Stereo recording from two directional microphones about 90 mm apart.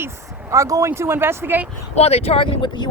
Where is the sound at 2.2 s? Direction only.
90° left; by 2.8 s 70° left (ahead or behind).